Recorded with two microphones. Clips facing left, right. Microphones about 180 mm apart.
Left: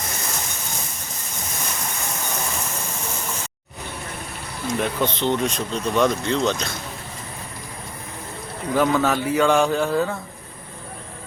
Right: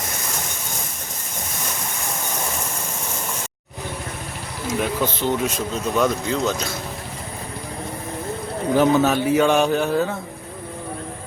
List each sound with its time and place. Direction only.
4.8 s speech: 5° right (ahead or behind)
8.7 s a man's voice: 20° right (ahead or behind)